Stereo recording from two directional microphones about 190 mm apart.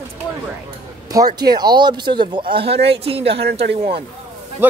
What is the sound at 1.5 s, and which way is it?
Speech, 20° right (ahead or behind).